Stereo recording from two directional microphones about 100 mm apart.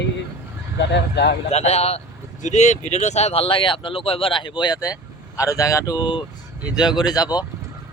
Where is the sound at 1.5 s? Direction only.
90° left.